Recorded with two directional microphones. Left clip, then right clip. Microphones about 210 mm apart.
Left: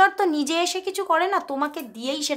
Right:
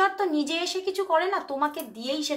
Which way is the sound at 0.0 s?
45° left (ahead or behind).